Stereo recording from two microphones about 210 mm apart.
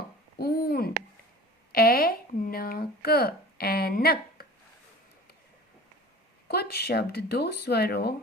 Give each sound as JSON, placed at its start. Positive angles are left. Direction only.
{"t": 0.3, "sound": "a sound", "side_deg": 50}
{"t": 1.7, "sound": "speech", "side_deg": 45}
{"t": 6.5, "sound": "speech", "side_deg": 50}